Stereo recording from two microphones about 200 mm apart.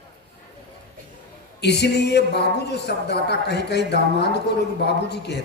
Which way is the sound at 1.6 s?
60° left (ahead or behind).